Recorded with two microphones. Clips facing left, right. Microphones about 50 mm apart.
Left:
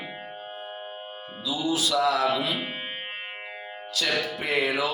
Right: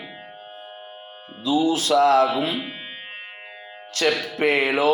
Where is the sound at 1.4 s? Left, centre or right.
Right.